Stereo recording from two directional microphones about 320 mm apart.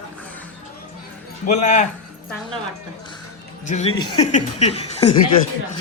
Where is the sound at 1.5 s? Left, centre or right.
Left.